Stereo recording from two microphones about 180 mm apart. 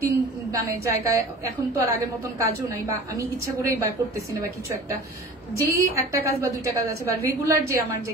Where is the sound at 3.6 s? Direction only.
15° right (ahead or behind).